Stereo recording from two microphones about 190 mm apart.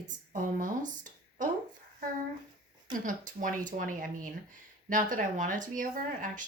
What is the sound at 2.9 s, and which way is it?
Speech, 45° right (ahead or behind).